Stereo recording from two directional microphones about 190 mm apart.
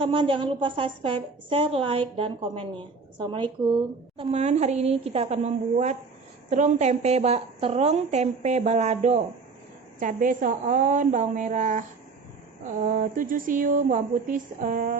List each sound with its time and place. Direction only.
0.0 s a woman's voice: 30° right (ahead or behind); by 14.9 s 45° right (ahead or behind)